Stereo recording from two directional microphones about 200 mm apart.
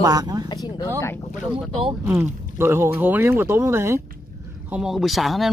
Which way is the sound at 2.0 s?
10° right (ahead or behind).